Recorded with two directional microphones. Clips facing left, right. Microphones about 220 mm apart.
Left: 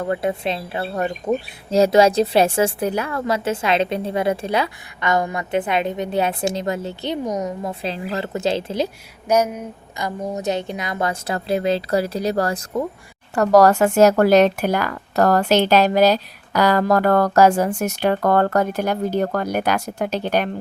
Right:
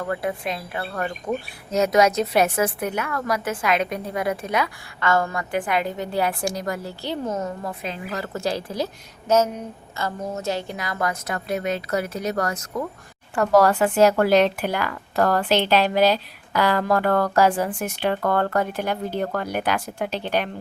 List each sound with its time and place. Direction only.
0.0 s a woman's voice: 25° left (ahead or behind)
4.9 s a woman's voice: 15° left (ahead or behind)
9.3 s a woman's voice: 10° left (ahead or behind); by 20.5 s 45° left (ahead or behind)